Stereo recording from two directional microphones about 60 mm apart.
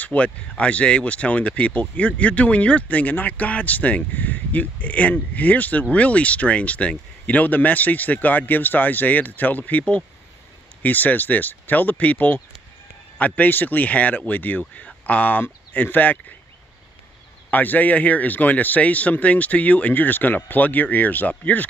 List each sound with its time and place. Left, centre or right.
0.0 s speech: left
17.5 s speech: left